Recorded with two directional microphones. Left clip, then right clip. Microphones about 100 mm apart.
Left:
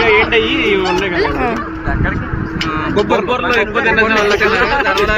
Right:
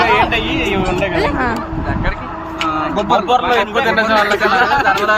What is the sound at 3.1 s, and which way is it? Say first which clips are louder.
Speech: right 6 dB; 90° right.